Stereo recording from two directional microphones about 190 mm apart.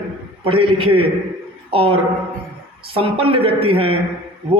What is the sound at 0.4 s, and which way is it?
A man's voice, 30° right (ahead or behind).